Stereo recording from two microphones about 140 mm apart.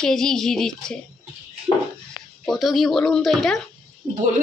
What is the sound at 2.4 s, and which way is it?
A woman's voice, centre (ahead or behind).